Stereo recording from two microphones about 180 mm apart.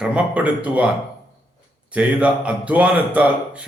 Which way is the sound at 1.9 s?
5° right (ahead or behind).